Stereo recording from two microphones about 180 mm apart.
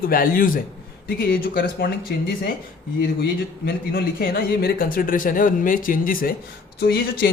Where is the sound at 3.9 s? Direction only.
55° left (ahead or behind).